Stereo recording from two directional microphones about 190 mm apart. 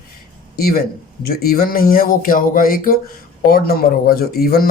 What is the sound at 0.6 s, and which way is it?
Speech, 50° left (ahead or behind).